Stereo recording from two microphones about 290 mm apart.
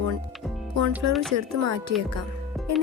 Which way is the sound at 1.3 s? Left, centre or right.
Right.